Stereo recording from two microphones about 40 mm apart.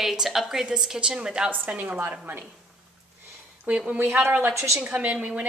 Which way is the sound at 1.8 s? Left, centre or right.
Right.